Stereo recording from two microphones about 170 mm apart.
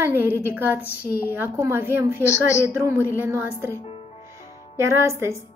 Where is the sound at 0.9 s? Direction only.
60° left (ahead or behind).